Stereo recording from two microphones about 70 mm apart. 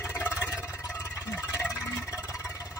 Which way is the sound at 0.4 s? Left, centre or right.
Left.